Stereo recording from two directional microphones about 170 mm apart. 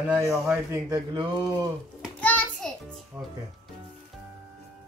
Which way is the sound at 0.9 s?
25° right (ahead or behind).